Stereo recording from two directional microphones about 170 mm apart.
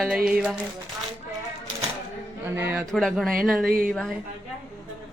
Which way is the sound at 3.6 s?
55° right (ahead or behind).